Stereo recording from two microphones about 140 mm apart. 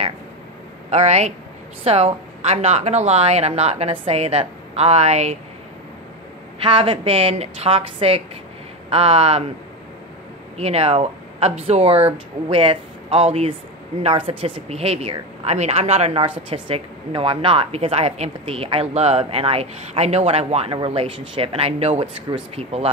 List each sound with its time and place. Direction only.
0.8 s a woman's voice: 50° right (ahead or behind)
6.6 s a woman's voice: 40° right (ahead or behind)
10.6 s a woman's voice: 50° right (ahead or behind)